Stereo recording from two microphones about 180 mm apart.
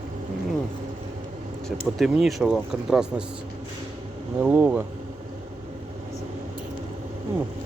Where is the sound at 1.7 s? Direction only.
Centre (ahead or behind).